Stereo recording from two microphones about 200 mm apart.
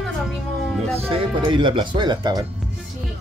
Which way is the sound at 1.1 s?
25° right (ahead or behind).